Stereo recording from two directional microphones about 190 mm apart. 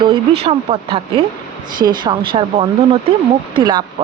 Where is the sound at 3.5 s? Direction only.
25° right (ahead or behind).